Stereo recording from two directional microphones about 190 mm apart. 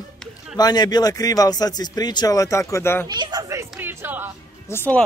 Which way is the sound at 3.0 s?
20° right (ahead or behind).